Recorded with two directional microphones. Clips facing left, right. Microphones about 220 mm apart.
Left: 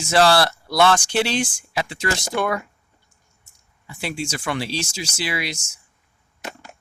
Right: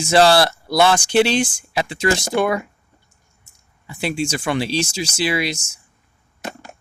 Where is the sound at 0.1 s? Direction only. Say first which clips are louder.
Right 3 dB; 20° right (ahead or behind).